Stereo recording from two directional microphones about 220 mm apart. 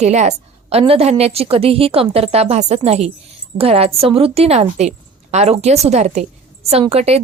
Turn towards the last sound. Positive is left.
turn(degrees=-30)  # may be behind; listen again after turning